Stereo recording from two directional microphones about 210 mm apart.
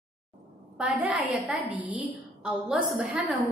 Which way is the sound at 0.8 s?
5° right (ahead or behind).